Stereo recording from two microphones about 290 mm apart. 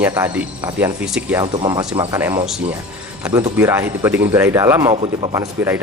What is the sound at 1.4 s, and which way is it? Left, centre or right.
Speech, centre.